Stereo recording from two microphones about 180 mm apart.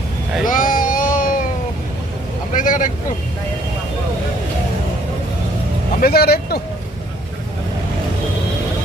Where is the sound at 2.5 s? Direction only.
45° left (ahead or behind).